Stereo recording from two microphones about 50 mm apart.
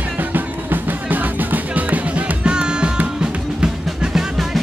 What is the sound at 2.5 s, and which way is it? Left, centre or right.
Music, centre.